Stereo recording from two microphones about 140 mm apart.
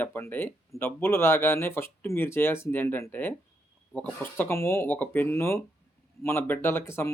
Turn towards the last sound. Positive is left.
turn(degrees=15)  # may be behind; listen again after turning